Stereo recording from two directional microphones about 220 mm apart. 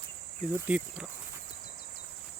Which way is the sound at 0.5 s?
5° right (ahead or behind).